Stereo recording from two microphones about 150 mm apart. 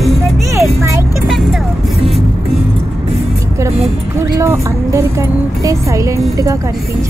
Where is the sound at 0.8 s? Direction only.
20° right (ahead or behind).